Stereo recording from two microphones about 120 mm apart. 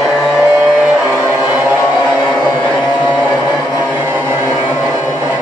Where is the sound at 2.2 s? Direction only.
5° left (ahead or behind).